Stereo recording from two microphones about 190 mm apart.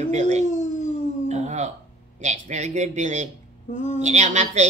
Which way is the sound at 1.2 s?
35° right (ahead or behind).